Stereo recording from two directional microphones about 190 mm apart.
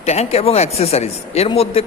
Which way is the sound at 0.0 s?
35° left (ahead or behind).